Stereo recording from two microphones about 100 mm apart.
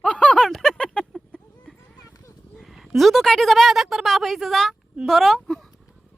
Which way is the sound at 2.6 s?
Centre (ahead or behind).